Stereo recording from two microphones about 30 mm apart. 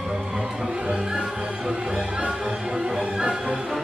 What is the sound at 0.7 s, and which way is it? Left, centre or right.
Music, right.